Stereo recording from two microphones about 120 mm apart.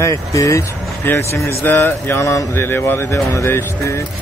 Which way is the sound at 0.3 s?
25° left (ahead or behind).